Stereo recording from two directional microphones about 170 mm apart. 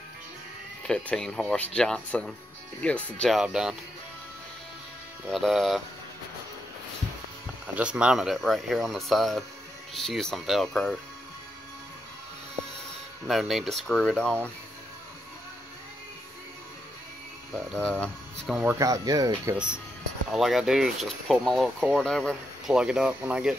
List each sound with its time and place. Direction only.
0.8 s speech: 5° left (ahead or behind)
5.2 s speech: centre (ahead or behind)
7.6 s speech: 5° right (ahead or behind)
13.3 s speech: centre (ahead or behind)
17.6 s speech: 5° left (ahead or behind)
18.6 s speech: 15° right (ahead or behind)
19.5 s speech: 5° right (ahead or behind)